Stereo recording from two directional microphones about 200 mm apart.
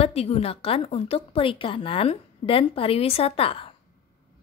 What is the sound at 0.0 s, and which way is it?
A woman's voice, 30° left (ahead or behind).